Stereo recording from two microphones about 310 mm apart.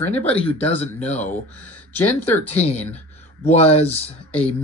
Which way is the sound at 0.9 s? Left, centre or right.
Left.